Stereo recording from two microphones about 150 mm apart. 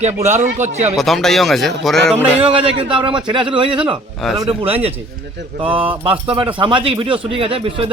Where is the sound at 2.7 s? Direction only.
35° right (ahead or behind).